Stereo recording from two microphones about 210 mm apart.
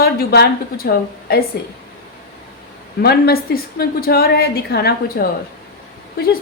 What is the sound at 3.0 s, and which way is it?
A woman's voice, 50° left (ahead or behind).